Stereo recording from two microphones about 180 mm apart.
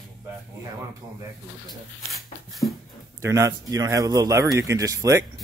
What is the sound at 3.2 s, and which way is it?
A man's voice, 15° right (ahead or behind).